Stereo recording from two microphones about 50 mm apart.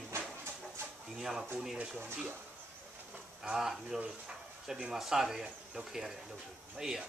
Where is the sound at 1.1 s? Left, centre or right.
Centre.